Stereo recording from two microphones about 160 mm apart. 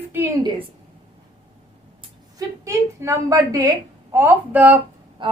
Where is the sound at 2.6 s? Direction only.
20° right (ahead or behind).